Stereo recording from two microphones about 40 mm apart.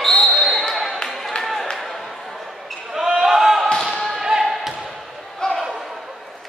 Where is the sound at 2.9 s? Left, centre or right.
Centre.